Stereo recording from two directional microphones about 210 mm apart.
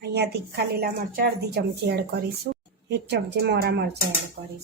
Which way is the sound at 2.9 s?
50° right (ahead or behind).